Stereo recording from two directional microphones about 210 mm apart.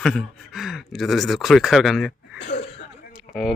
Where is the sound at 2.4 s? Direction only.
30° left (ahead or behind).